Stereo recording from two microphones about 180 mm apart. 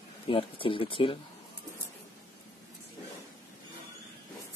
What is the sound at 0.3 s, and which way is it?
Speech, 30° left (ahead or behind).